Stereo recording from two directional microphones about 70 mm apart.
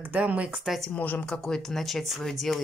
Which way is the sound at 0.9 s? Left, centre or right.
Left.